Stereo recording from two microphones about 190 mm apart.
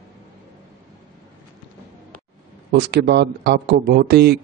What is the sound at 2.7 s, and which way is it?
Speech, 60° right (ahead or behind).